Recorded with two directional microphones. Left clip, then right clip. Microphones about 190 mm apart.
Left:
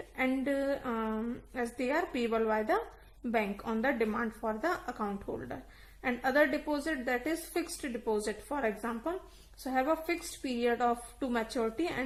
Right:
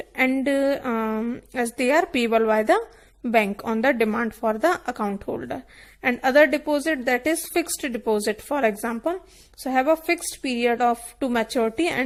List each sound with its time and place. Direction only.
0.2 s a woman's voice: 40° right (ahead or behind)